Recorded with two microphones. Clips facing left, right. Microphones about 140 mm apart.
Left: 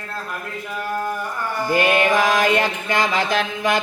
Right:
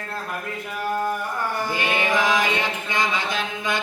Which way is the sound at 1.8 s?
90° left.